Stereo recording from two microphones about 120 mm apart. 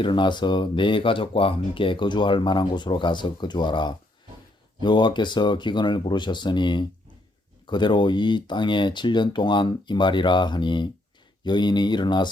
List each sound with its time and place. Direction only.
0.0 s speech: 40° left (ahead or behind)